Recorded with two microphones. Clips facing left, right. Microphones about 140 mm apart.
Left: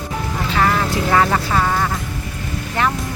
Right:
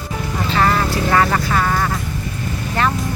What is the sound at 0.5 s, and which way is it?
Vehicle, 5° left (ahead or behind).